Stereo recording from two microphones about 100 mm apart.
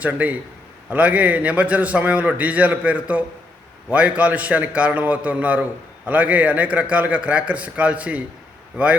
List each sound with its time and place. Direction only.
0.0 s a man's voice: 15° right (ahead or behind)